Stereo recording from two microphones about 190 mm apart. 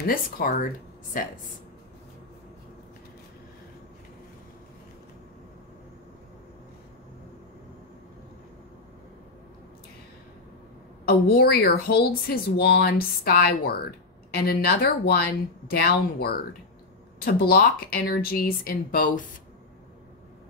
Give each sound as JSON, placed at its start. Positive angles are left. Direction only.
{"t": 0.0, "sound": "speech", "side_deg": 50}
{"t": 11.1, "sound": "speech", "side_deg": 55}